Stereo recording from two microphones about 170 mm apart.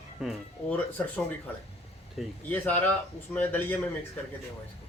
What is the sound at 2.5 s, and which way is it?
A man's voice, 10° left (ahead or behind).